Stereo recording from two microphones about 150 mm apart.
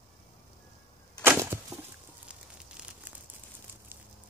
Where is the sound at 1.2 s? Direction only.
15° right (ahead or behind).